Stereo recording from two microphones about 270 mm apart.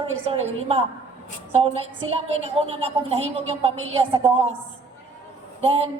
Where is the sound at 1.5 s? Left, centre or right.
Right.